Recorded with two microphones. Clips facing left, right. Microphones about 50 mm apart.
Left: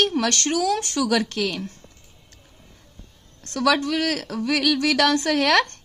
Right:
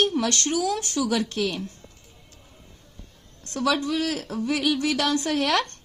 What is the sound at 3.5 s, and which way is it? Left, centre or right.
A woman's voice, left.